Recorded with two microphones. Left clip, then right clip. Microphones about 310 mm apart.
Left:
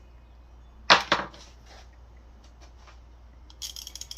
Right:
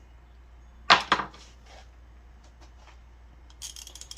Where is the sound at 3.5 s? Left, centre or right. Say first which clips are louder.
Left 4 dB; centre.